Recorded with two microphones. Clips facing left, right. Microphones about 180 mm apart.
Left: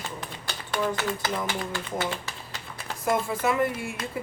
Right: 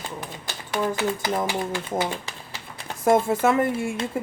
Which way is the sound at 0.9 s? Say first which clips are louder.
Right 4 dB; 15° right (ahead or behind).